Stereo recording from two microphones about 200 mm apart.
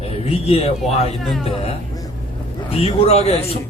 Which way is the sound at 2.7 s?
30° left (ahead or behind).